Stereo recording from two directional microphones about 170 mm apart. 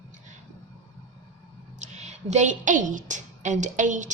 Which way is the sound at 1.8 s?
40° right (ahead or behind).